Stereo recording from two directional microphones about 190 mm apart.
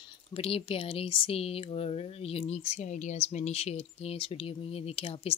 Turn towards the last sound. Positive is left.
turn(degrees=30)  # may be behind; listen again after turning